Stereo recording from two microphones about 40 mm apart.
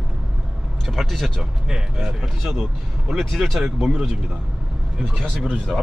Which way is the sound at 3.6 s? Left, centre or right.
Centre.